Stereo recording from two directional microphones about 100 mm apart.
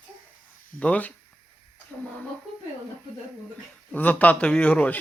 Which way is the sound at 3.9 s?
15° left (ahead or behind).